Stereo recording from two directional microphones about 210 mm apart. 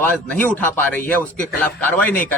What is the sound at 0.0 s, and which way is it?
Speech, 10° left (ahead or behind).